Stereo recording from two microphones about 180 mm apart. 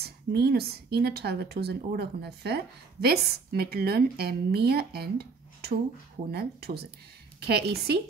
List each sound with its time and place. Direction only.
0.0 s speech: 60° right (ahead or behind)